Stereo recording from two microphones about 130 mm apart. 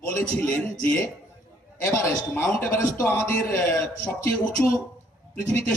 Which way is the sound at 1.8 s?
20° left (ahead or behind).